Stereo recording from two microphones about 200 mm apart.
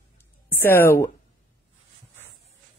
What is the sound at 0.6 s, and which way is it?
Speech, 10° left (ahead or behind).